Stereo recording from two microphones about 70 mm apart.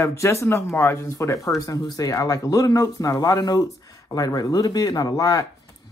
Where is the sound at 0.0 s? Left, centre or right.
Left.